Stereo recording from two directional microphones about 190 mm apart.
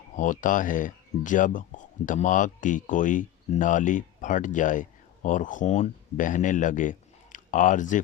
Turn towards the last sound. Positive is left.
turn(degrees=40)  # may be behind; listen again after turning